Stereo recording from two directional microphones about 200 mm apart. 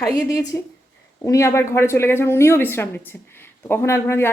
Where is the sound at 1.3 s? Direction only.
15° left (ahead or behind).